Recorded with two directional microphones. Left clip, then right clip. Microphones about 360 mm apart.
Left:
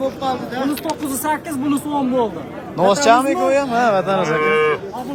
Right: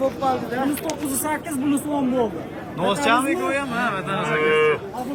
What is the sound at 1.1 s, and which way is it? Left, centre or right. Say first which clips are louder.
Cattle: left 5 dB; centre.